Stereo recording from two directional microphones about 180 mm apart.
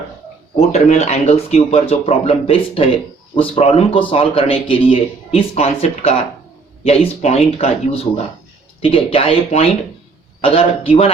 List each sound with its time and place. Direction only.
0.5 s a man's voice: 35° left (ahead or behind)